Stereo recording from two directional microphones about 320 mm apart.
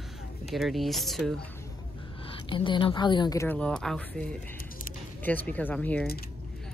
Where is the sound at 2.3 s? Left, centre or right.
Centre.